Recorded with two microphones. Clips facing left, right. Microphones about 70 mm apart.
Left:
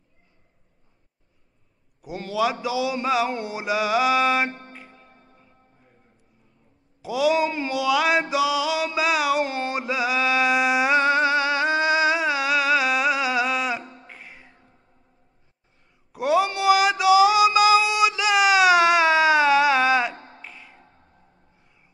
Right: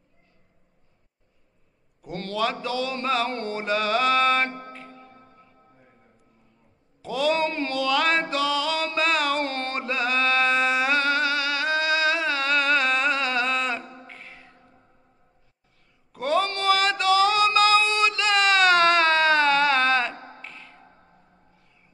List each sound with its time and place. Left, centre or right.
2.0 s a man's voice: centre
7.0 s mantra: centre
16.1 s a sound: centre